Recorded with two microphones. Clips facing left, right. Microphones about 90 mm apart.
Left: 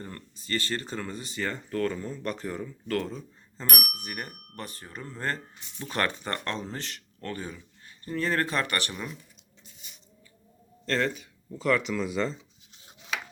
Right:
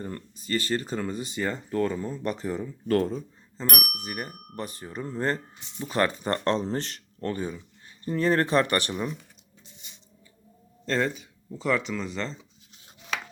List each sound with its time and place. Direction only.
0.0 s speech: 15° right (ahead or behind)
2.8 s speech: 35° right (ahead or behind)
4.0 s speech: 15° right (ahead or behind)
6.2 s speech: 30° right (ahead or behind)
7.3 s speech: 20° right (ahead or behind)
10.8 s a man's voice: 10° right (ahead or behind)
11.8 s speech: centre (ahead or behind)